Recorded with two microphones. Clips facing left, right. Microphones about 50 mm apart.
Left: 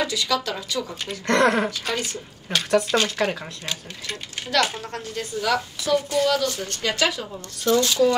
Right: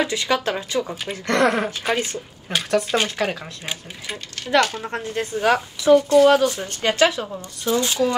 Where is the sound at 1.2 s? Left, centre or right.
Centre.